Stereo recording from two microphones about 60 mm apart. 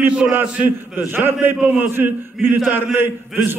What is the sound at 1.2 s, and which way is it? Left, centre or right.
A man's voice, right.